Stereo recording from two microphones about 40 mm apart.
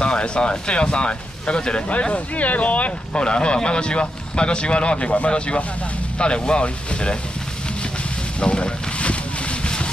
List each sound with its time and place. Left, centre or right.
0.0 s speech: left
1.9 s speech: left
3.2 s a man's voice: left
8.4 s a sound: left